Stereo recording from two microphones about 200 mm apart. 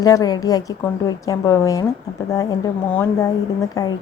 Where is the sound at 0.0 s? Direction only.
20° left (ahead or behind).